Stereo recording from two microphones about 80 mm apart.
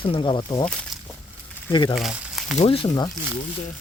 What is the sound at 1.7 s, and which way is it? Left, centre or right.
Speech, left.